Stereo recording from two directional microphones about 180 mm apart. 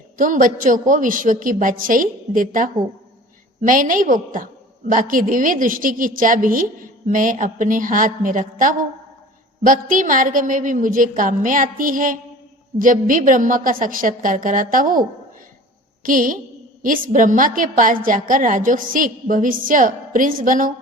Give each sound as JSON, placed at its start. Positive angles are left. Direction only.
{"t": 0.2, "sound": "a woman's voice", "side_deg": -50}
{"t": 3.7, "sound": "a woman's voice", "side_deg": -50}
{"t": 16.0, "sound": "a woman's voice", "side_deg": -50}